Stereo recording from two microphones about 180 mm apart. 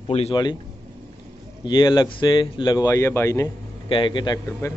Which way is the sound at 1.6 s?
25° left (ahead or behind).